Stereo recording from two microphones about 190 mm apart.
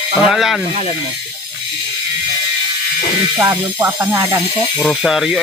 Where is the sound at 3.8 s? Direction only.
10° right (ahead or behind).